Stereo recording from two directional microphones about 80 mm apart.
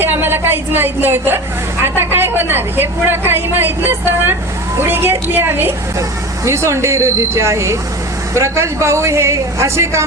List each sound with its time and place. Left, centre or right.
0.0 s a woman's voice: right
6.0 s speech: right